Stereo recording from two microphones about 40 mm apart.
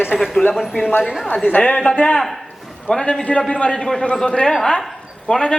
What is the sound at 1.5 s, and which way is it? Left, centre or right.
Speech, left.